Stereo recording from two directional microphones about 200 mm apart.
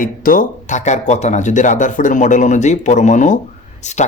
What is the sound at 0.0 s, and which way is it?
Speech, 45° left (ahead or behind).